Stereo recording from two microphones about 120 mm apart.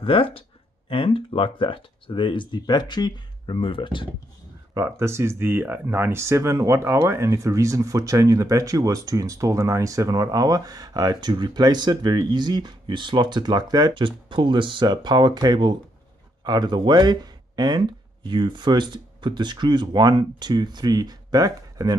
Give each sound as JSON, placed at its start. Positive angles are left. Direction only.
{"t": 0.0, "sound": "speech", "side_deg": 45}
{"t": 4.7, "sound": "speech", "side_deg": -25}